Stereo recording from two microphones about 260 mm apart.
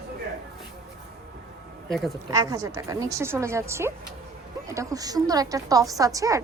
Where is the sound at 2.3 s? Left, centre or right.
Centre.